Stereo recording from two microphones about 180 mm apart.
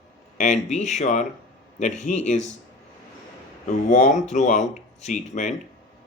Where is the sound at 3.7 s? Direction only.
40° left (ahead or behind).